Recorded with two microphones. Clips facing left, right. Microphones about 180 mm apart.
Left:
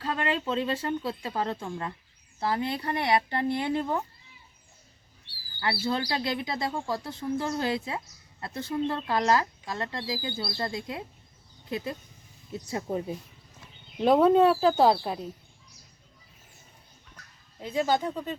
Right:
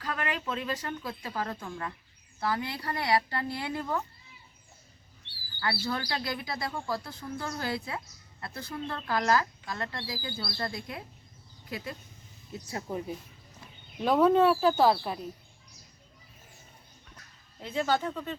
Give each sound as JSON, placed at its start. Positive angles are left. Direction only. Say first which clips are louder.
{"t": 0.0, "sound": "speech", "louder": "left 4 dB", "side_deg": 25}
{"t": 5.5, "sound": "speech", "louder": "left 3 dB", "side_deg": 25}
{"t": 12.9, "sound": "speech", "louder": "left 2 dB", "side_deg": 25}
{"t": 17.6, "sound": "speech", "louder": "left 3 dB", "side_deg": 10}